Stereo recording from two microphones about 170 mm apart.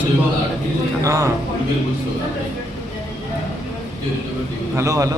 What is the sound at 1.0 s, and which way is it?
Speech, 20° right (ahead or behind).